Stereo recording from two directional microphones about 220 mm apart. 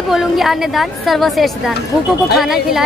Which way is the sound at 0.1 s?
Centre (ahead or behind).